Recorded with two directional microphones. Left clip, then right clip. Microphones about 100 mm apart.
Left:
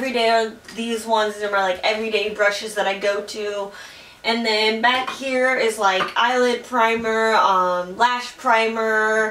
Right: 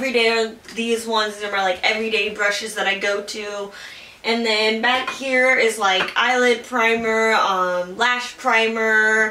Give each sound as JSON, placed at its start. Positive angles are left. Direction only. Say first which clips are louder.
{"t": 0.0, "sound": "speech", "louder": "even", "side_deg": -5}
{"t": 4.3, "sound": "speech", "louder": "even", "side_deg": 0}